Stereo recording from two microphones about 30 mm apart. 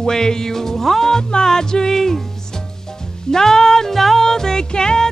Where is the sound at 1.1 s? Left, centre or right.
Left.